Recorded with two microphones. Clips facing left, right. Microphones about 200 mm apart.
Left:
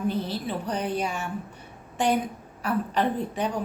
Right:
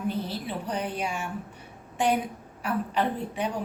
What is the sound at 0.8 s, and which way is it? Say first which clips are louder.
Speech: left 3 dB; 40° left (ahead or behind).